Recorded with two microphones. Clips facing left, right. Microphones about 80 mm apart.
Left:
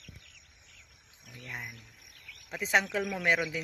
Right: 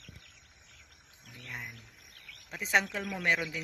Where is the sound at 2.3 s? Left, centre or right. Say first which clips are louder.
Left 1 dB; centre.